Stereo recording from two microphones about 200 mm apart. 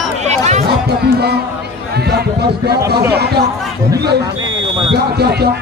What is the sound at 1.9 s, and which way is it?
Speech, 55° right (ahead or behind).